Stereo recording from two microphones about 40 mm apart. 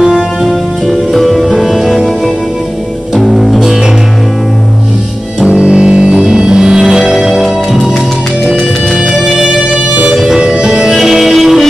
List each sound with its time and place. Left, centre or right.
0.1 s music: centre
5.4 s music: centre
10.1 s music: centre
11.0 s music: centre